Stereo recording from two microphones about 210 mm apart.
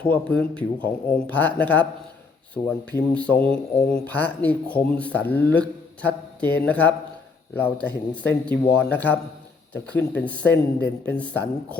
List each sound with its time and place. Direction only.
0.0 s speech: 5° left (ahead or behind)
10.5 s speech: 50° left (ahead or behind)
11.0 s speech: 5° left (ahead or behind)